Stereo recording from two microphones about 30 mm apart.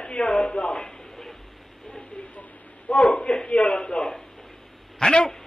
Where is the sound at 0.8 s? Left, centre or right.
Centre.